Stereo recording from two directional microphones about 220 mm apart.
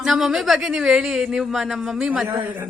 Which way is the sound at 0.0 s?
Centre (ahead or behind).